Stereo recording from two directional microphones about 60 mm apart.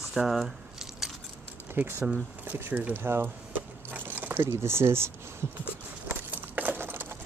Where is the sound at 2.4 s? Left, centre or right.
Right.